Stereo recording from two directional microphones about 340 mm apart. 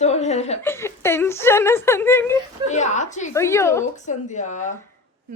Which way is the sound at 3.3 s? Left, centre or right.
Centre.